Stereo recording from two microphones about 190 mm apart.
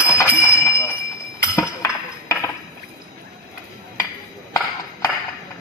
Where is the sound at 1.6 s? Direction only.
15° left (ahead or behind).